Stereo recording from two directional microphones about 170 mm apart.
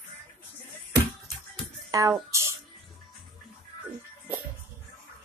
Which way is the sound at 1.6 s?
20° right (ahead or behind).